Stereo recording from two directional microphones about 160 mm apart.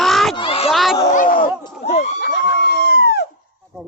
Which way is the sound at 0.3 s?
35° left (ahead or behind).